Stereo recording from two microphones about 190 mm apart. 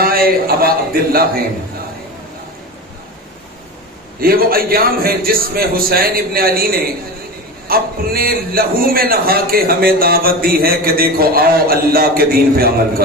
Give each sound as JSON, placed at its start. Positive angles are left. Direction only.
{"t": 0.0, "sound": "a man's voice", "side_deg": -50}
{"t": 4.2, "sound": "a man's voice", "side_deg": -50}